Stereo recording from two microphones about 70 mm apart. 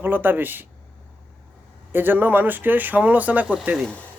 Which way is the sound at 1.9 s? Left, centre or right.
Right.